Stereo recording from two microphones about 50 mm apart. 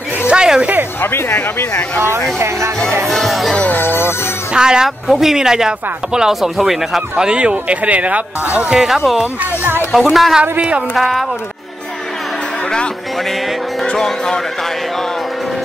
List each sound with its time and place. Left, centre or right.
0.3 s a sound: centre
1.0 s speech: left
2.0 s speech: right
2.3 s speech: right
3.1 s music: centre
3.6 s music: left
4.6 s speech: centre
7.2 s speech: right
8.5 s speech: centre
8.8 s speech: centre
9.6 s speech: right
9.9 s speech: centre
13.8 s speech: centre